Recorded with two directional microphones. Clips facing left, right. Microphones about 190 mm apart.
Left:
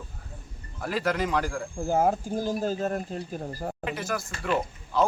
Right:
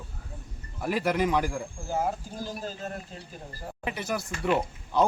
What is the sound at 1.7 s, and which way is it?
Speech, 55° left (ahead or behind).